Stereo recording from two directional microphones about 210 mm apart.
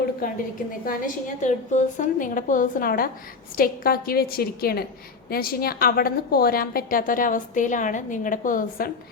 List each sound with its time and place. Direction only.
0.7 s a woman's voice: 40° left (ahead or behind)